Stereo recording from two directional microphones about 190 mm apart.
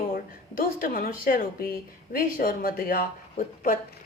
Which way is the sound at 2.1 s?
50° left (ahead or behind).